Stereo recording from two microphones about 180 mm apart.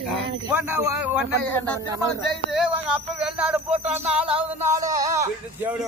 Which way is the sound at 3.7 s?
35° right (ahead or behind).